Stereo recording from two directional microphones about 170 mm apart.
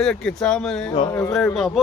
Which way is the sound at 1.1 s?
20° left (ahead or behind).